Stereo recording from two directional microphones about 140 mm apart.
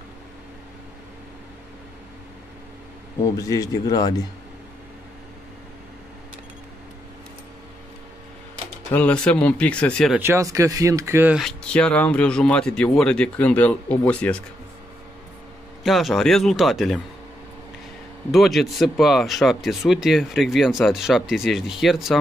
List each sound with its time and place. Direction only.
3.3 s a man's voice: 25° left (ahead or behind)
8.9 s speech: 10° left (ahead or behind)
10.1 s speech: 20° right (ahead or behind)
11.3 s speech: 5° left (ahead or behind)
15.8 s speech: centre (ahead or behind)
18.3 s speech: centre (ahead or behind)